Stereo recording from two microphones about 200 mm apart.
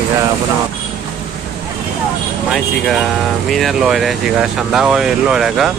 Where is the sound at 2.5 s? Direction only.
Centre (ahead or behind).